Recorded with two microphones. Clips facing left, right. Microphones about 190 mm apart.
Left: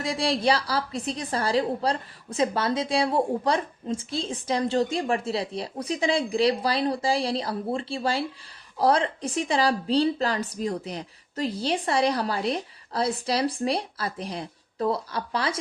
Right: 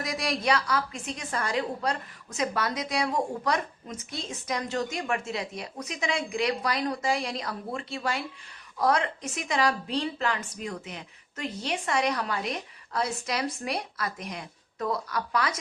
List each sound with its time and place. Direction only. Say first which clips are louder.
0.0 s a woman's voice: left 5 dB; 30° left (ahead or behind)